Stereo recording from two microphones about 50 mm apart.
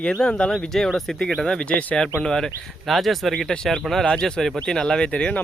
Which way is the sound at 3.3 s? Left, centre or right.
Centre.